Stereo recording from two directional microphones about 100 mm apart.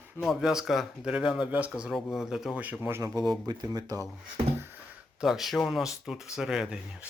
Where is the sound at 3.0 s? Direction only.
40° right (ahead or behind).